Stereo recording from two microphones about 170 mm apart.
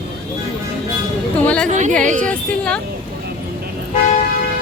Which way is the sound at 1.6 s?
45° right (ahead or behind).